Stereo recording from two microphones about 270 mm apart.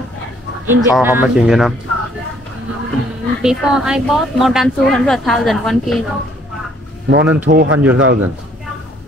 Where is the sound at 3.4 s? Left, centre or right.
Centre.